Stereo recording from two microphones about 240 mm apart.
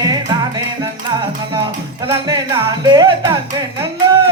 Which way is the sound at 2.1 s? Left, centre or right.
Centre.